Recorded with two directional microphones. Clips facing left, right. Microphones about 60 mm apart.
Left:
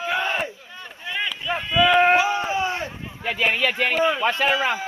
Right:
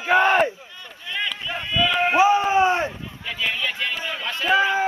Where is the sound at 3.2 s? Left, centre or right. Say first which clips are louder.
Left 4 dB; left.